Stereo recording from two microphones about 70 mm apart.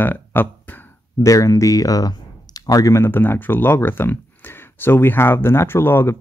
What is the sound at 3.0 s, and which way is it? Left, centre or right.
Speech, left.